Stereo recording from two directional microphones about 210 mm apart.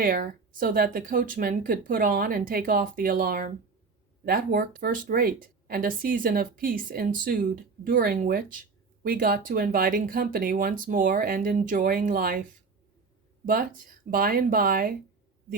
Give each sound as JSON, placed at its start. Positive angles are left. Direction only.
{"t": 0.0, "sound": "speech", "side_deg": -40}
{"t": 13.4, "sound": "speech", "side_deg": -40}